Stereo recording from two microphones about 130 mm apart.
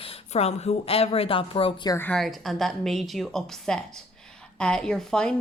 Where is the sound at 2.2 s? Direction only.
Centre (ahead or behind).